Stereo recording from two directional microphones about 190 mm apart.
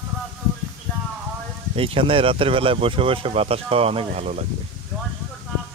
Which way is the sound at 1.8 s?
30° right (ahead or behind).